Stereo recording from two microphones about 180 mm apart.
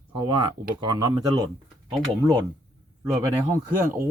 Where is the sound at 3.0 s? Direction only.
15° right (ahead or behind).